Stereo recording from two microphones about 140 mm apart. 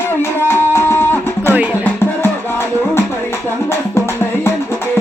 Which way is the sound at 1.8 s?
15° left (ahead or behind).